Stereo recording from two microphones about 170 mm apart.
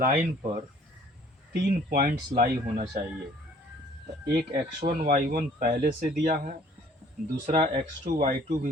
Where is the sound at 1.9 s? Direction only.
60° right (ahead or behind).